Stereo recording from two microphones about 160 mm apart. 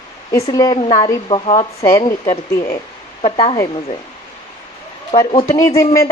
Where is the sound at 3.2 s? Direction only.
35° left (ahead or behind).